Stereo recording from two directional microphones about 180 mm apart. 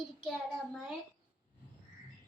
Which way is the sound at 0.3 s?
Centre (ahead or behind).